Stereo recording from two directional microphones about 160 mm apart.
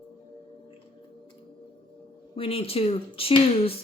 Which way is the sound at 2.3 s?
35° left (ahead or behind).